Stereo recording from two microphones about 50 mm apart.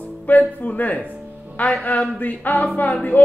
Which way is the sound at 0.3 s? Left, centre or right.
Left.